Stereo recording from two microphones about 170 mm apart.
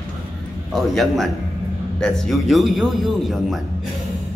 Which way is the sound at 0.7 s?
Centre (ahead or behind).